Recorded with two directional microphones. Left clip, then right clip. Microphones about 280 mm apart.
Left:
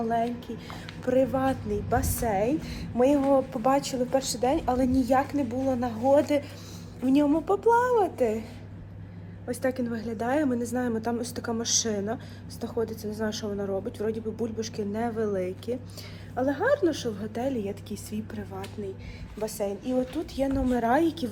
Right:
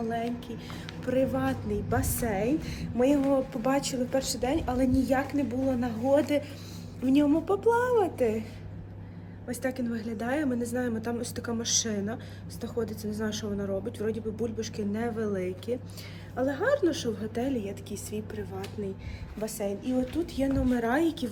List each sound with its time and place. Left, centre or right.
0.3 s a woman's voice: centre
1.0 s a woman's voice: centre
9.5 s a woman's voice: centre